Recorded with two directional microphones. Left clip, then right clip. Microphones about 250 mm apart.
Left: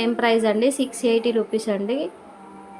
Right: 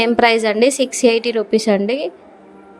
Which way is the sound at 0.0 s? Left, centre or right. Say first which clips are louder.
Right 6 dB; right.